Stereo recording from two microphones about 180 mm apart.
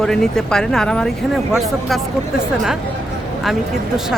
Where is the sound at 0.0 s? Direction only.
5° left (ahead or behind).